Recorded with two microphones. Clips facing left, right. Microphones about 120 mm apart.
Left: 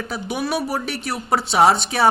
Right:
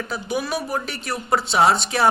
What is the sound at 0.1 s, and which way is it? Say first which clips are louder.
A man's voice: left 2 dB; 60° left (ahead or behind).